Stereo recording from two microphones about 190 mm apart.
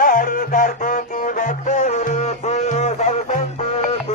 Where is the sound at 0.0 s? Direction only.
45° left (ahead or behind).